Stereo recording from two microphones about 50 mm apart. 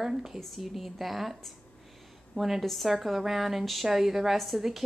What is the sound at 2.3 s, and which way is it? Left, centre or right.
A woman's voice, centre.